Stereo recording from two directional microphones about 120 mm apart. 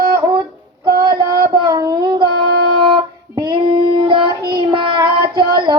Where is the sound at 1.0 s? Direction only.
35° right (ahead or behind).